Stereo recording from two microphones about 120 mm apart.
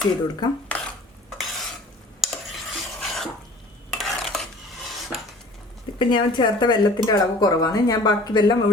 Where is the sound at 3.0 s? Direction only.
Centre (ahead or behind).